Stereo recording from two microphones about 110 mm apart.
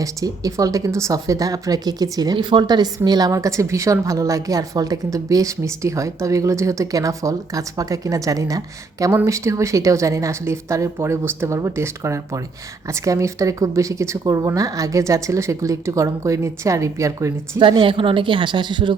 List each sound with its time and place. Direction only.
0.0 s a woman's voice: 30° right (ahead or behind)
17.6 s a woman's voice: 50° right (ahead or behind)